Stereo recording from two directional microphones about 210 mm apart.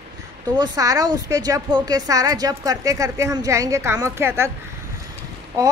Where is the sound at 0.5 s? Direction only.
15° right (ahead or behind).